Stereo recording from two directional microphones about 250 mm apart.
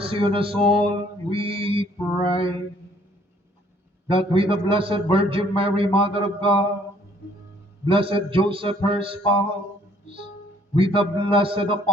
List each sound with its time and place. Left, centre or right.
0.0 s mantra: right
4.1 s mantra: right
7.9 s mantra: right
10.9 s mantra: right